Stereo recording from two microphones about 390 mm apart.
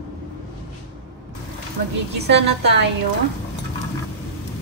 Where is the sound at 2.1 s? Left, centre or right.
Right.